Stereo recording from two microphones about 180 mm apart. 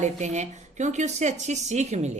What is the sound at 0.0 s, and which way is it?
Speech, 40° right (ahead or behind).